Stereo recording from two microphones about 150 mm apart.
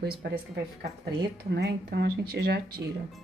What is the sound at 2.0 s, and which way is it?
Speech, 90° right.